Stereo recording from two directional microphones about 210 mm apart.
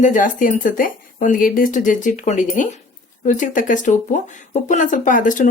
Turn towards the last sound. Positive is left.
turn(degrees=40)  # may be behind; listen again after turning